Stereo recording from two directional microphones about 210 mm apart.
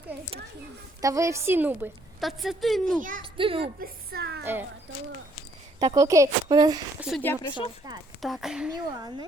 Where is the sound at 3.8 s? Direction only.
45° right (ahead or behind).